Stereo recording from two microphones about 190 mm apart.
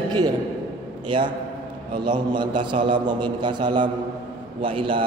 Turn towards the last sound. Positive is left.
turn(degrees=-25)  # may be behind; listen again after turning